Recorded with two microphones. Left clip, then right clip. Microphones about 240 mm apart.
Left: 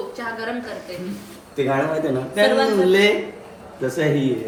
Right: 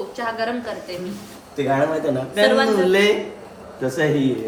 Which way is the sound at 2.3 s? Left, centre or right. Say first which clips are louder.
Even; centre.